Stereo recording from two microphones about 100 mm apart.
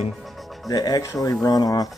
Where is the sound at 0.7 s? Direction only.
40° left (ahead or behind).